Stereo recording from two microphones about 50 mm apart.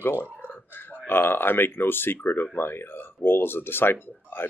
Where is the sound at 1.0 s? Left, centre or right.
Left.